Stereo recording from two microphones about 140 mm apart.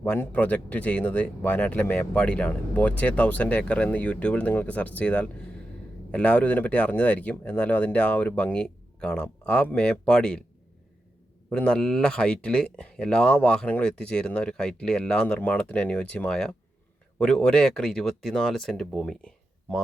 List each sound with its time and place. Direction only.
0.0 s speech: 10° left (ahead or behind)
11.4 s speech: 5° left (ahead or behind)